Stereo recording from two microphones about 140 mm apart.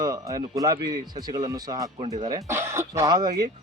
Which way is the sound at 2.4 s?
20° right (ahead or behind).